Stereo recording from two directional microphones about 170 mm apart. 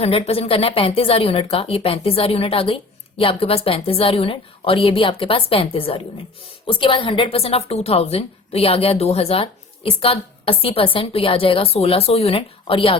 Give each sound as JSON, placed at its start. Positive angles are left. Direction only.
{"t": 0.0, "sound": "a woman's voice", "side_deg": 35}